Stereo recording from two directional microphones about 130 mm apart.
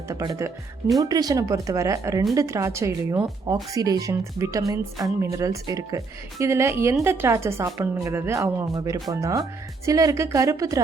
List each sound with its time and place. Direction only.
0.1 s speech: 30° right (ahead or behind)